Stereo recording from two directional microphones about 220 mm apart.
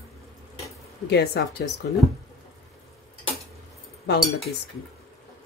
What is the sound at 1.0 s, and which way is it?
Speech, 50° left (ahead or behind).